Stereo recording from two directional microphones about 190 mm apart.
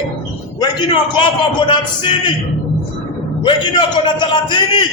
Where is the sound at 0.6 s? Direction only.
25° left (ahead or behind).